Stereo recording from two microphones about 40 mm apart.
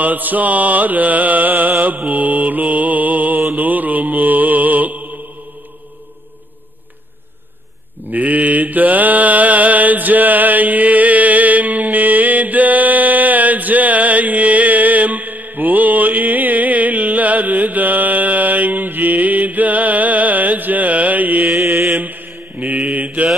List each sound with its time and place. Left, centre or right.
0.0 s music: right
3.5 s mantra: right
8.1 s mantra: right
22.6 s mantra: right